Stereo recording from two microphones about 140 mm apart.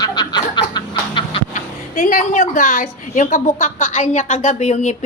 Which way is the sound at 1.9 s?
75° left (ahead or behind).